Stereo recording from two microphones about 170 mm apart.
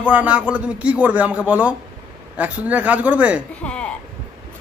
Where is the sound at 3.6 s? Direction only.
5° left (ahead or behind).